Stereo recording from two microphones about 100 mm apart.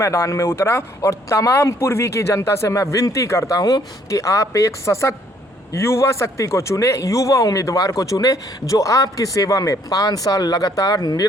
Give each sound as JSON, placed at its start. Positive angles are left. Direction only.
{"t": 0.0, "sound": "a man's voice", "side_deg": 30}